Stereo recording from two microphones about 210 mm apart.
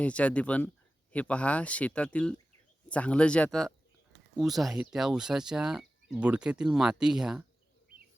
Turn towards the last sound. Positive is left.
turn(degrees=-5)  # may be behind; listen again after turning